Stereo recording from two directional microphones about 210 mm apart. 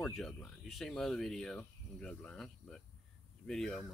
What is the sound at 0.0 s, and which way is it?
Speech, centre (ahead or behind).